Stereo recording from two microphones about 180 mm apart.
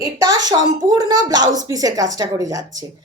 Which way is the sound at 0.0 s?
20° right (ahead or behind).